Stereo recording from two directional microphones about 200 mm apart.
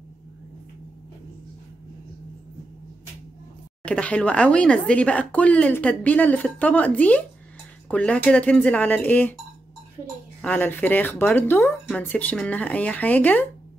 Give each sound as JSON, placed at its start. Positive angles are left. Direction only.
{"t": 3.8, "sound": "speech", "side_deg": 5}
{"t": 10.4, "sound": "speech", "side_deg": 10}